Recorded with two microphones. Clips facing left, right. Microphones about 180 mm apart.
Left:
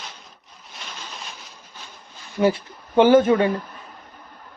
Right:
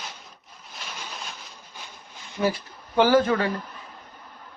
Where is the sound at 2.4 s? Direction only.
25° left (ahead or behind).